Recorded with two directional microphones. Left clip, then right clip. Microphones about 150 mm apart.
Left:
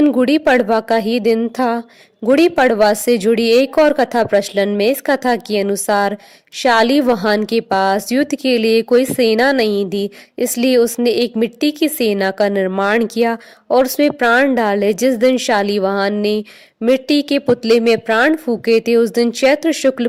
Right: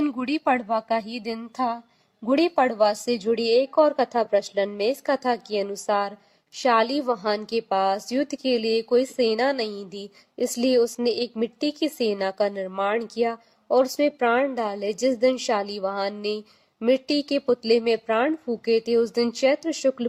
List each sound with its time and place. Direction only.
0.4 s a woman's voice: 50° left (ahead or behind)